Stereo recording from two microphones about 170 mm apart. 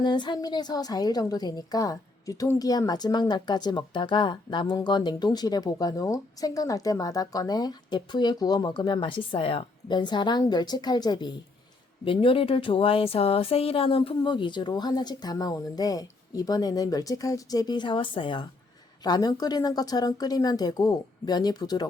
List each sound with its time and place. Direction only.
0.0 s a woman's voice: 25° left (ahead or behind)